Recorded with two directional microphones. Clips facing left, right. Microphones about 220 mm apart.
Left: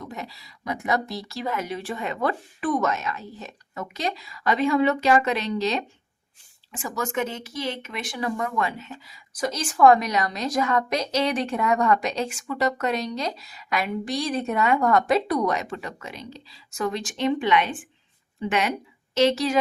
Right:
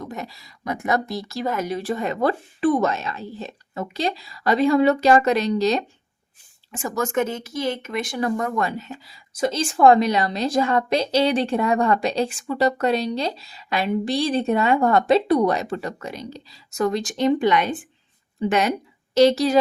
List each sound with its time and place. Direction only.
0.0 s speech: 45° right (ahead or behind)